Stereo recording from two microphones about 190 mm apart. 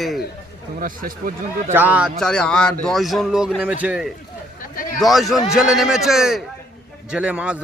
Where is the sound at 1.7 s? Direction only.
10° right (ahead or behind).